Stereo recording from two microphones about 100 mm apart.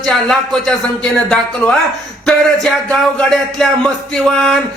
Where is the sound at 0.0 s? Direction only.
5° left (ahead or behind).